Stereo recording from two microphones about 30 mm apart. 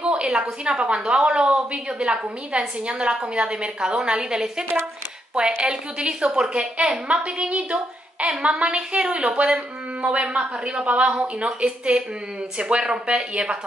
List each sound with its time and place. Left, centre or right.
0.0 s a sound: right
0.3 s a woman's voice: right
13.0 s a woman's voice: right